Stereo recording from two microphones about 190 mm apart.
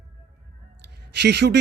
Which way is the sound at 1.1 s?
60° right (ahead or behind).